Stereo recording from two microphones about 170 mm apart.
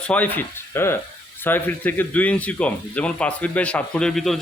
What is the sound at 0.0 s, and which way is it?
Speech, 10° left (ahead or behind).